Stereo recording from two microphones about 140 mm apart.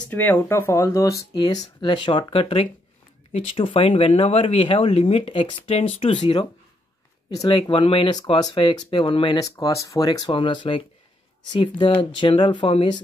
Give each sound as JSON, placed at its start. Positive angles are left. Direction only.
{"t": 0.1, "sound": "speech", "side_deg": 15}
{"t": 6.1, "sound": "speech", "side_deg": 35}
{"t": 10.3, "sound": "speech", "side_deg": 35}